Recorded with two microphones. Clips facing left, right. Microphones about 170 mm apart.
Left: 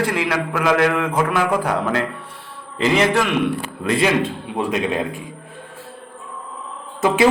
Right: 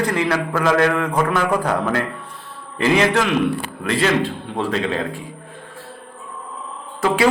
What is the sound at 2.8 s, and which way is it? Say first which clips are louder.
A man's voice: even; 20° left (ahead or behind).